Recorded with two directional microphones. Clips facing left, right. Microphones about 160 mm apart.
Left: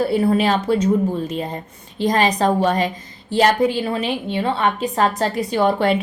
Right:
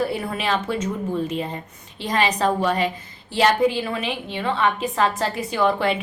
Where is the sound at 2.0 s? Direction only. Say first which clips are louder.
Left 4 dB; 40° left (ahead or behind).